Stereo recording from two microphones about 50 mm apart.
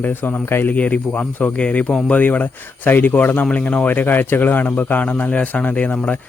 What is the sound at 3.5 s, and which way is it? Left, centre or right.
Speech, left.